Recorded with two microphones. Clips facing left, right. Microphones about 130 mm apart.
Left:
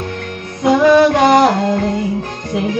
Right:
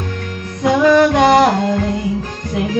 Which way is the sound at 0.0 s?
50° left (ahead or behind).